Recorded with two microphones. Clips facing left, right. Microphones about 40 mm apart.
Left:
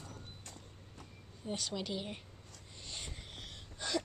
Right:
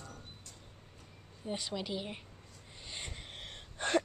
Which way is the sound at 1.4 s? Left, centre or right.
Centre.